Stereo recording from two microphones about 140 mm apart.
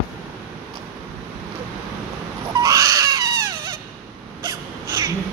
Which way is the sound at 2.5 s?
25° right (ahead or behind).